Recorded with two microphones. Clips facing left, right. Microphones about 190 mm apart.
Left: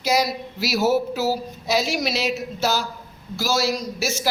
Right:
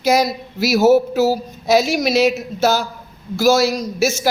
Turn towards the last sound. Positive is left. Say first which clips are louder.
# right 6 dB
turn(degrees=-50)  # may be behind; listen again after turning